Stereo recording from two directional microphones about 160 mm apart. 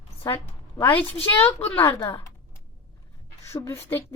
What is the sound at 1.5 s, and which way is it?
Speech, 10° left (ahead or behind).